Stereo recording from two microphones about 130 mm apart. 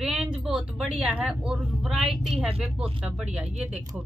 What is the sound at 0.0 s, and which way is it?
A woman's voice, 5° right (ahead or behind).